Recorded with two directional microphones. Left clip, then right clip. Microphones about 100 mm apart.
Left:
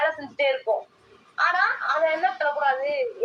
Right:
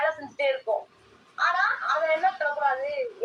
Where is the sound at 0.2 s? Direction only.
45° left (ahead or behind).